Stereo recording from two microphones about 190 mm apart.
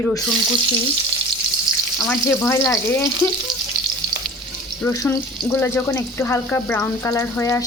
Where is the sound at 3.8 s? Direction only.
50° right (ahead or behind).